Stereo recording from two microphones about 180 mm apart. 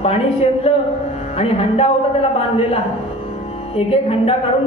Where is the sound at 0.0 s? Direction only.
35° left (ahead or behind).